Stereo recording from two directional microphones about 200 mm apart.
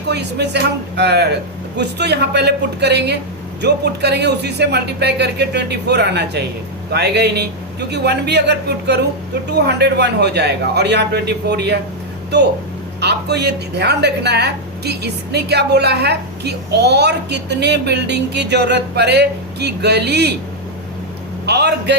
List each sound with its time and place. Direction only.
0.1 s a woman's voice: 55° right (ahead or behind)
21.4 s a woman's voice: 55° right (ahead or behind)